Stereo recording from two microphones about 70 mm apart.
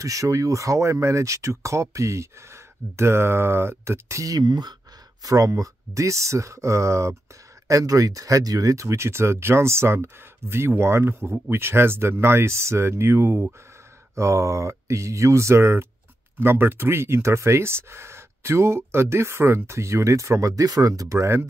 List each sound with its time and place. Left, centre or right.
0.0 s speech: right
5.2 s speech: right